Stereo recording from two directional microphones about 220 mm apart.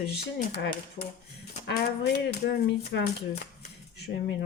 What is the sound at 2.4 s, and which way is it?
Speech, 50° left (ahead or behind).